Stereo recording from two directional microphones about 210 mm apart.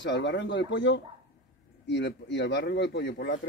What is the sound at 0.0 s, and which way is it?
A man's voice, 55° left (ahead or behind).